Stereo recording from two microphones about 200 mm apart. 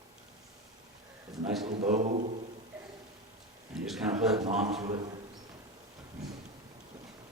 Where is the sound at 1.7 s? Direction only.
35° right (ahead or behind).